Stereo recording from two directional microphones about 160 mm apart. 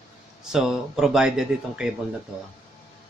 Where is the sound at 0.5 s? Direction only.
5° right (ahead or behind).